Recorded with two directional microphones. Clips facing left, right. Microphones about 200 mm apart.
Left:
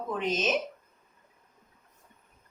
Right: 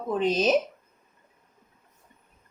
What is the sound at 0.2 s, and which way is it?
Speech, 35° right (ahead or behind).